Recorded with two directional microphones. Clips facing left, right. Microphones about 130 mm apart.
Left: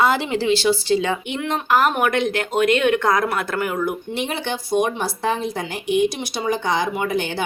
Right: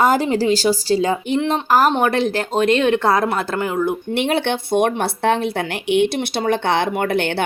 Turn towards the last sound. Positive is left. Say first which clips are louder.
# right 3 dB
turn(degrees=-65)  # may be behind; listen again after turning